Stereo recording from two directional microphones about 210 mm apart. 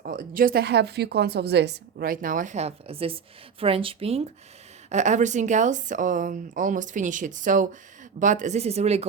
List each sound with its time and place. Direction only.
0.0 s a woman's voice: 40° right (ahead or behind)